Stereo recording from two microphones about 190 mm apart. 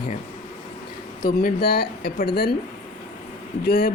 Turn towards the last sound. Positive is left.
turn(degrees=55)  # may be behind; listen again after turning